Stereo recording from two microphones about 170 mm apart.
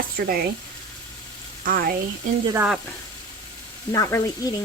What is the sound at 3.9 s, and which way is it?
Speech, 20° left (ahead or behind).